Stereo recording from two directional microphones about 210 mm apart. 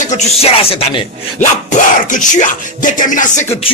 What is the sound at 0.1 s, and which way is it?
Speech, 30° left (ahead or behind).